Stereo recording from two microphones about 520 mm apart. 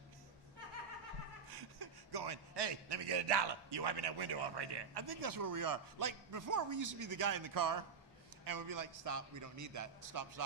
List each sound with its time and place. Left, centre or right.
1.5 s a man's voice: right